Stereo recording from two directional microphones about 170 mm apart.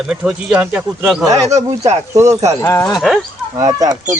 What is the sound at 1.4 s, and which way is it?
Speech, 40° right (ahead or behind).